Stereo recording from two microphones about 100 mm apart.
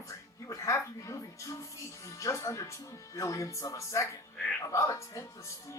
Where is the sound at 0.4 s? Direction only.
35° left (ahead or behind).